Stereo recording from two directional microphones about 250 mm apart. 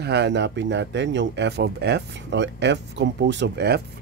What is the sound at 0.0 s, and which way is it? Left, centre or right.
Speech, right.